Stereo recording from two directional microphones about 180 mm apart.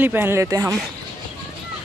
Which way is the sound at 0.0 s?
10° right (ahead or behind).